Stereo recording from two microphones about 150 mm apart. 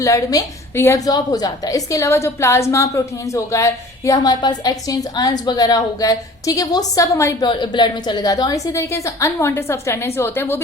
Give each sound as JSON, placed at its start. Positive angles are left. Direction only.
{"t": 0.0, "sound": "a woman's voice", "side_deg": 20}
{"t": 7.4, "sound": "a woman's voice", "side_deg": 30}